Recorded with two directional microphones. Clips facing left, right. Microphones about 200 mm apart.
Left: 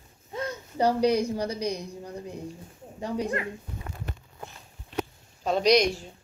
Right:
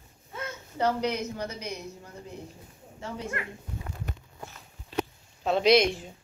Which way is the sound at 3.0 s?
15° left (ahead or behind).